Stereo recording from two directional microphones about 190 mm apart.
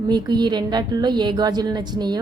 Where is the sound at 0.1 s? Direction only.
25° right (ahead or behind).